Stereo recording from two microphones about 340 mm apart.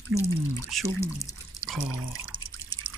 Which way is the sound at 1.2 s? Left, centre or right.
Centre.